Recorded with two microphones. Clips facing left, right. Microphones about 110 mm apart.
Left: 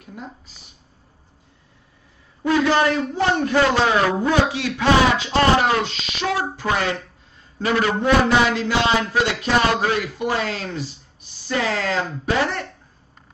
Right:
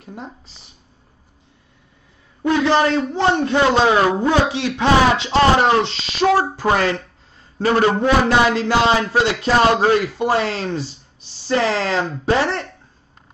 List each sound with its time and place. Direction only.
0.0 s a sound: 30° right (ahead or behind)
2.4 s a man's voice: 25° right (ahead or behind)
6.3 s a man's voice: 40° right (ahead or behind)